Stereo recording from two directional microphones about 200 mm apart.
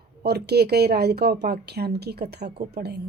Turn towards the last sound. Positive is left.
turn(degrees=-55)  # may be behind; listen again after turning